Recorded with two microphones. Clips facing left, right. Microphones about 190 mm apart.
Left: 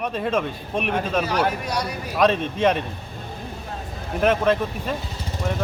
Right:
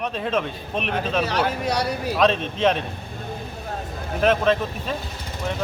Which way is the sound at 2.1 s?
10° left (ahead or behind).